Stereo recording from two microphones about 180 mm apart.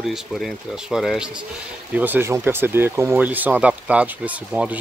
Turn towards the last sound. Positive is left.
turn(degrees=-5)  # may be behind; listen again after turning